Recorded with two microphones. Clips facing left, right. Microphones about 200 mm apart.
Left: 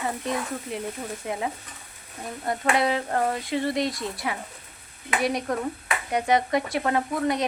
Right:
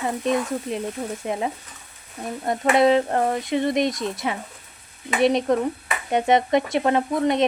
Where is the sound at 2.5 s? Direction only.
20° right (ahead or behind).